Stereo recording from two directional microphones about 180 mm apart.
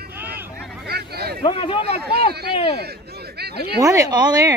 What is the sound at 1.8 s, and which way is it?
Speech, 60° right (ahead or behind).